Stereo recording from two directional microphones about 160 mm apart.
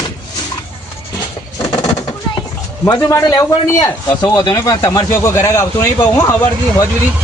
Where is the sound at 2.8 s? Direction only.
20° left (ahead or behind).